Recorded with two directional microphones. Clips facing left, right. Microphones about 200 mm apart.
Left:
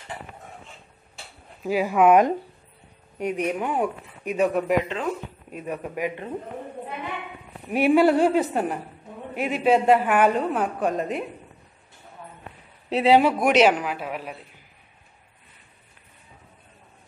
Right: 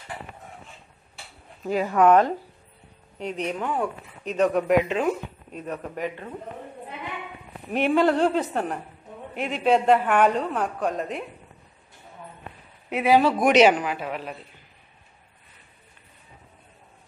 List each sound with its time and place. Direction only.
1.6 s speech: 5° left (ahead or behind)
4.8 s speech: 15° right (ahead or behind)
5.5 s speech: 10° left (ahead or behind)
7.7 s a woman's voice: 10° left (ahead or behind)
12.9 s speech: 25° left (ahead or behind)
13.2 s a woman's voice: 10° left (ahead or behind)